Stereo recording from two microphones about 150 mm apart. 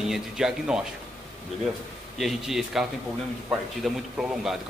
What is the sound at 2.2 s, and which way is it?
A man's voice, centre (ahead or behind).